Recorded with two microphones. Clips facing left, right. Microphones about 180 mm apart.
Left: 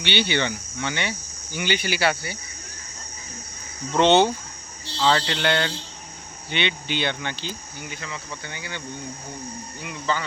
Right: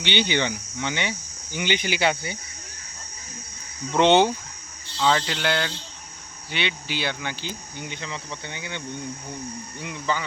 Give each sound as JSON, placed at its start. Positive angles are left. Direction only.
{"t": 0.0, "sound": "speech", "side_deg": -15}
{"t": 3.9, "sound": "speech", "side_deg": -15}
{"t": 4.9, "sound": "speech", "side_deg": 0}
{"t": 7.8, "sound": "speech", "side_deg": -25}
{"t": 9.8, "sound": "speech", "side_deg": -15}